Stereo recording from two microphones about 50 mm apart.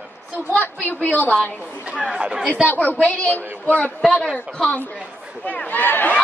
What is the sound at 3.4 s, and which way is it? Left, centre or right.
Speech, right.